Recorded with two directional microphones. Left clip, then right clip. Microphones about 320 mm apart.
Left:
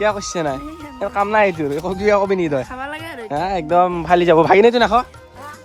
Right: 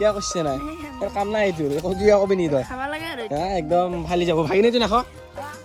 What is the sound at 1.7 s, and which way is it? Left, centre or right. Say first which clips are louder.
Speech: left 1 dB; centre.